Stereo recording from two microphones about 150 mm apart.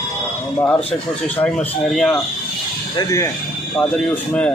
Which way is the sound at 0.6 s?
10° left (ahead or behind).